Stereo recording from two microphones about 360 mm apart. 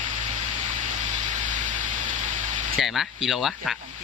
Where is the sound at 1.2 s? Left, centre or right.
Right.